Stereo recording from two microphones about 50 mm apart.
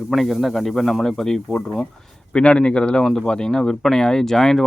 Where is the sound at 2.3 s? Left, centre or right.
Left.